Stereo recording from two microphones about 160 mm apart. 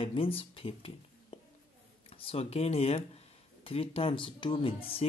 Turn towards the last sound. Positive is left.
turn(degrees=35)  # may be behind; listen again after turning